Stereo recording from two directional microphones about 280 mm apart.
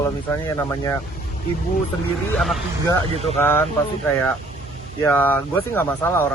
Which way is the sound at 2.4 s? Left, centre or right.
Centre.